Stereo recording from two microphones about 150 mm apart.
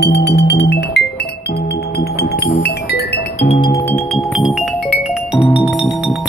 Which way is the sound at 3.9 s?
5° left (ahead or behind).